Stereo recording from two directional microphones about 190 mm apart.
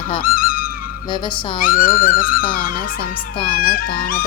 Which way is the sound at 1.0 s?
25° left (ahead or behind).